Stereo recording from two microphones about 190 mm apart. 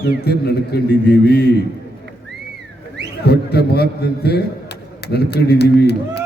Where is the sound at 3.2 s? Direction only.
60° left (ahead or behind).